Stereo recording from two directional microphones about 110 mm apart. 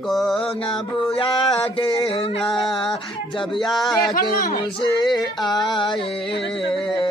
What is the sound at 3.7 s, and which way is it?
Mantra, centre (ahead or behind).